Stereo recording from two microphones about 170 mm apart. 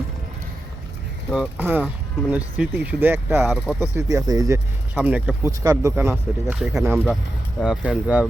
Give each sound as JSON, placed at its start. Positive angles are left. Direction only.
{"t": 1.3, "sound": "speech", "side_deg": -10}
{"t": 3.8, "sound": "speech", "side_deg": -20}
{"t": 6.6, "sound": "speech", "side_deg": -5}